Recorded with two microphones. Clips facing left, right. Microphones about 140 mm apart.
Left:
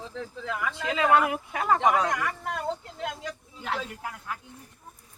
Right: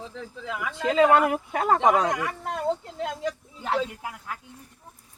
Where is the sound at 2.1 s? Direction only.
25° right (ahead or behind).